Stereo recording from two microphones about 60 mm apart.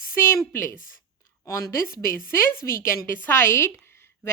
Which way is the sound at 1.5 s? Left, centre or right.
Left.